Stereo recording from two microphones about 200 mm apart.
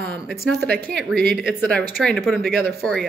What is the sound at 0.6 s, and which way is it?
Speech, 50° right (ahead or behind).